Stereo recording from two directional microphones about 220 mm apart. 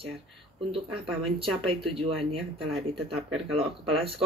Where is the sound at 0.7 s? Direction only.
25° right (ahead or behind).